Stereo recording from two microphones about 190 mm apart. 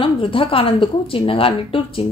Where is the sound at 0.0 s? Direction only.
30° left (ahead or behind).